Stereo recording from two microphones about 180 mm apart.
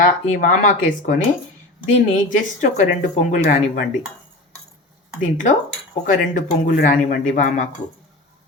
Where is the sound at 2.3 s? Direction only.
40° left (ahead or behind).